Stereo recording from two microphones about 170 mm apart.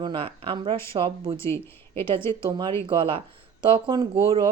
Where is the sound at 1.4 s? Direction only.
15° left (ahead or behind).